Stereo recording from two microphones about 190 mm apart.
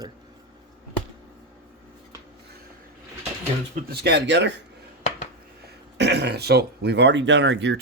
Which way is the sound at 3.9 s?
60° right (ahead or behind).